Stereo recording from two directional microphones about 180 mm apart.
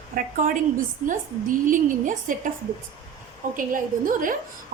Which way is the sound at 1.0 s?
45° right (ahead or behind).